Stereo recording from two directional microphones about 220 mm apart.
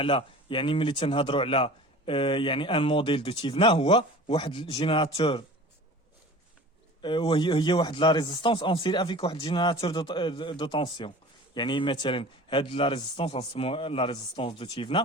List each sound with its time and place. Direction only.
0.0 s speech: 25° left (ahead or behind)
7.0 s speech: 20° left (ahead or behind)